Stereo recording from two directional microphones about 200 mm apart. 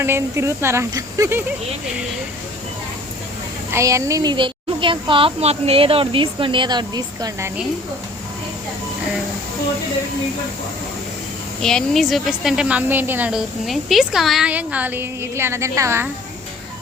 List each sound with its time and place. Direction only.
0.0 s a woman's voice: 10° right (ahead or behind)
3.7 s speech: 15° right (ahead or behind)
11.6 s a woman's voice: centre (ahead or behind); by 16.0 s 15° right (ahead or behind)